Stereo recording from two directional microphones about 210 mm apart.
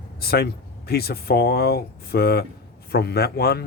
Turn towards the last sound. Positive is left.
turn(degrees=50)  # may be behind; listen again after turning